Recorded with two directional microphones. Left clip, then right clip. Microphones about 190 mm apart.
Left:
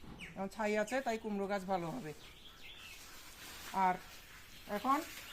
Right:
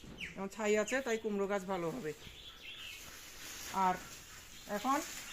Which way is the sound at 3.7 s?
10° right (ahead or behind).